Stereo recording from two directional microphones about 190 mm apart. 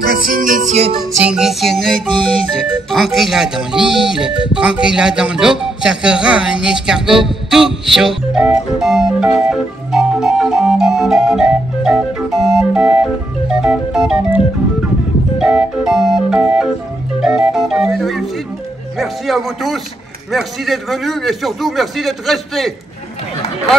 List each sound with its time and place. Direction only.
0.0 s music: 50° right (ahead or behind)
1.2 s speech: 5° right (ahead or behind)
9.5 s organ: 5° right (ahead or behind)
15.3 s music: 5° right (ahead or behind)
20.2 s speech: centre (ahead or behind)